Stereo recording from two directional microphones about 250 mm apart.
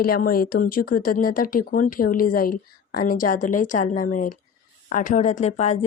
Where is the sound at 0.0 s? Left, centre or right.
Left.